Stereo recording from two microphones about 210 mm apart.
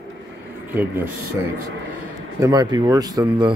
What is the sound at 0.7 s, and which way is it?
Speech, 10° right (ahead or behind).